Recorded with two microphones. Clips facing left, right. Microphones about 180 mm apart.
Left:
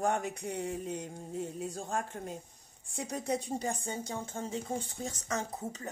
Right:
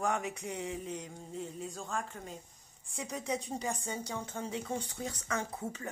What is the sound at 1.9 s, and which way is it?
Speech, 60° left (ahead or behind).